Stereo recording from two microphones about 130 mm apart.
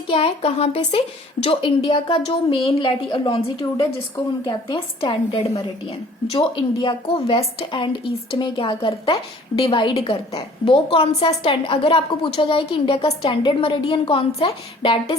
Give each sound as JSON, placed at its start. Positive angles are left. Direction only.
{"t": 0.1, "sound": "a woman's voice", "side_deg": 50}
{"t": 4.9, "sound": "a woman's voice", "side_deg": 40}